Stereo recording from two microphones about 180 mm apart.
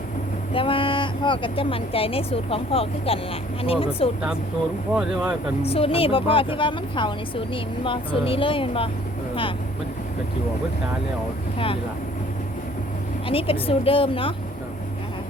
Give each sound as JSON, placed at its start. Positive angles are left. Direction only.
{"t": 0.5, "sound": "a woman's voice", "side_deg": 30}
{"t": 4.9, "sound": "speech", "side_deg": -5}
{"t": 5.6, "sound": "speech", "side_deg": 30}
{"t": 13.2, "sound": "speech", "side_deg": 30}